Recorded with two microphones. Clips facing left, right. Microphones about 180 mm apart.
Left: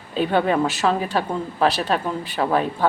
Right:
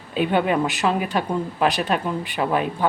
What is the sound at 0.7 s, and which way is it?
Speech, 15° right (ahead or behind).